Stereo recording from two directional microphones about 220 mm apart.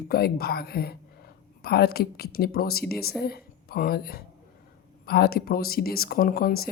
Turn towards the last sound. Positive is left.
turn(degrees=45)  # may be behind; listen again after turning